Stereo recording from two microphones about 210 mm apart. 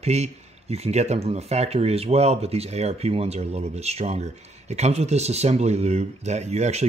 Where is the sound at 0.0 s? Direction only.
30° right (ahead or behind).